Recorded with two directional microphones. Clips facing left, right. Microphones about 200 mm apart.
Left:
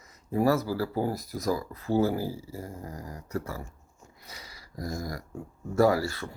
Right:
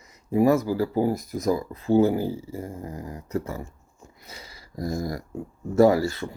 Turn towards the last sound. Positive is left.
turn(degrees=-20)  # may be behind; listen again after turning